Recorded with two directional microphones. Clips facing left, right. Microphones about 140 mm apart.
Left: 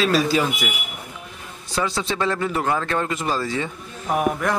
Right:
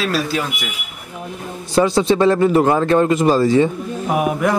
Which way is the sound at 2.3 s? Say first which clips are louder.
Right 9 dB; 30° right (ahead or behind).